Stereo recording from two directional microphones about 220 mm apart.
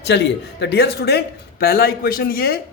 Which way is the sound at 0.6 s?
50° left (ahead or behind).